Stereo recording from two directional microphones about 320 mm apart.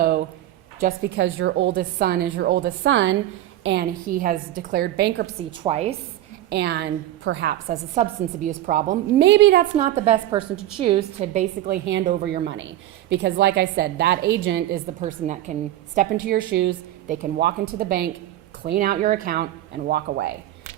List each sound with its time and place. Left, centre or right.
0.0 s a sound: right
0.8 s a woman's voice: right
5.5 s a woman's voice: centre
6.5 s a woman's voice: right
8.0 s a woman's voice: right
9.7 s a woman's voice: centre